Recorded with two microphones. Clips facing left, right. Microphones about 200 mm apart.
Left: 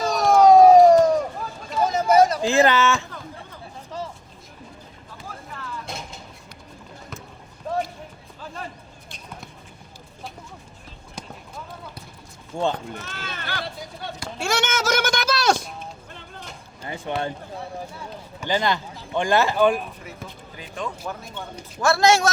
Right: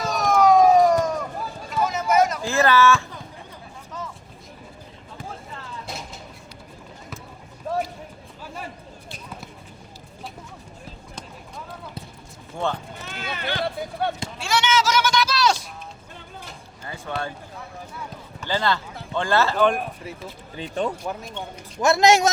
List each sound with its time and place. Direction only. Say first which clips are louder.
0.0 s a sound: left 3 dB; 35° left (ahead or behind)
2.4 s speech: left 1 dB; 20° left (ahead or behind)
3.9 s vehicle: left 3 dB; 30° left (ahead or behind)
5.8 s vehicle: even; centre (ahead or behind)
7.7 s basketball bounce: even; 5° right (ahead or behind)
9.0 s basketball bounce: right 1 dB; 5° right (ahead or behind)
12.5 s horse: left 3 dB; 15° left (ahead or behind)
13.0 s a sound: right 3 dB; 15° right (ahead or behind)
14.3 s a sound: right 1 dB; 45° left (ahead or behind)
16.8 s basketball bounce: left 3 dB; 20° left (ahead or behind)
18.3 s speech: left 1 dB; 15° left (ahead or behind)
20.6 s speech: right 6 dB; 35° right (ahead or behind)
21.8 s a man's voice: right 1 dB; 20° right (ahead or behind)